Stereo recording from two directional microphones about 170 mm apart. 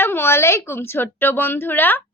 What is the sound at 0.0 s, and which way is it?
A woman's voice, 15° left (ahead or behind).